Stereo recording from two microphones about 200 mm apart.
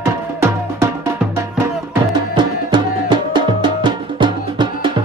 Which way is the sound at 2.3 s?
20° right (ahead or behind).